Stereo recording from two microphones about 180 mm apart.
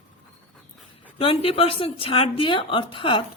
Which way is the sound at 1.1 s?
30° left (ahead or behind).